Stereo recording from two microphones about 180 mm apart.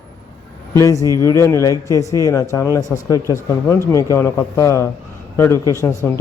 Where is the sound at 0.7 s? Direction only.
20° left (ahead or behind).